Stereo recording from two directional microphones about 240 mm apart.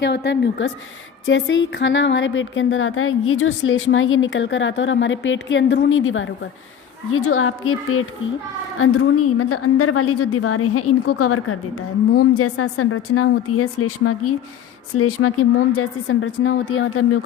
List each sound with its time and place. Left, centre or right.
0.0 s a woman's voice: left